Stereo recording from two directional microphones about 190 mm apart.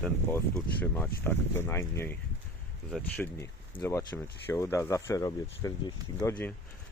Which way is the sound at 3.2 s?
15° left (ahead or behind).